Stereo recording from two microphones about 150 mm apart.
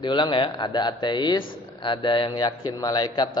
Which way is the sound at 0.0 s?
30° left (ahead or behind).